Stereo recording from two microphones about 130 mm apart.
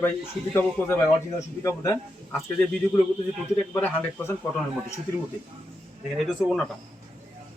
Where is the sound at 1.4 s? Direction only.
25° left (ahead or behind).